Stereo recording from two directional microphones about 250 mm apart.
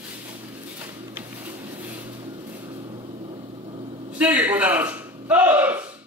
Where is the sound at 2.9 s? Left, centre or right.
Centre.